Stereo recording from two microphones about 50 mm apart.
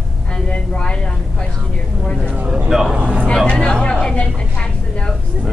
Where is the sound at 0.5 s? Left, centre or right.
Left.